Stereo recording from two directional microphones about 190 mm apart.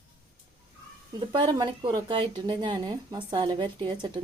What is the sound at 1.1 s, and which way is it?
Speech, 25° right (ahead or behind).